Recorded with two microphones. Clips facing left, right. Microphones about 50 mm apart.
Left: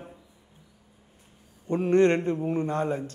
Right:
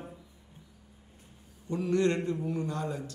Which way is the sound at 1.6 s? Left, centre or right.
Left.